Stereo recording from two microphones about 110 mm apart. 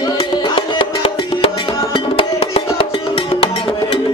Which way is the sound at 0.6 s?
60° left (ahead or behind).